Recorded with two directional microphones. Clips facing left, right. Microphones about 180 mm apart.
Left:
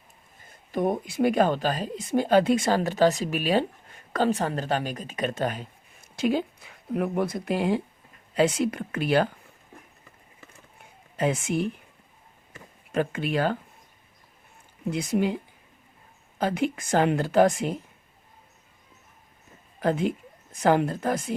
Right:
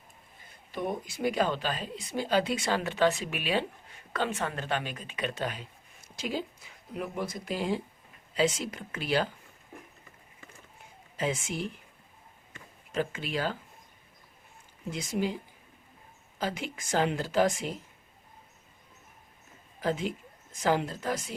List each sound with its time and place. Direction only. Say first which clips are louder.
0.7 s speech: left 8 dB; 50° left (ahead or behind)
6.1 s speech: left 9 dB; 60° left (ahead or behind)
11.2 s speech: left 6 dB; 60° left (ahead or behind)
12.9 s speech: left 6 dB; 55° left (ahead or behind)
14.8 s speech: left 6 dB; 60° left (ahead or behind)
16.4 s speech: left 8 dB; 55° left (ahead or behind)
19.8 s speech: left 6 dB; 55° left (ahead or behind)